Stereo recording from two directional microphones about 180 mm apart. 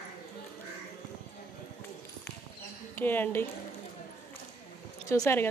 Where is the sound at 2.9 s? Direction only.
10° left (ahead or behind).